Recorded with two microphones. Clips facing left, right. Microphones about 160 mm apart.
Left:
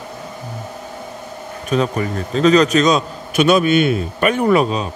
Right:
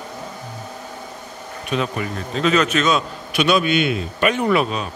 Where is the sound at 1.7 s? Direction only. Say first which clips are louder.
Left 5 dB; 40° left (ahead or behind).